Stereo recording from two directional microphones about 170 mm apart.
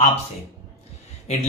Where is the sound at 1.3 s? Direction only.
40° left (ahead or behind).